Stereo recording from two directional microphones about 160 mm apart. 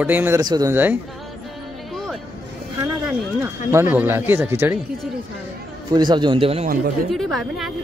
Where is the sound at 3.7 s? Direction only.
15° right (ahead or behind).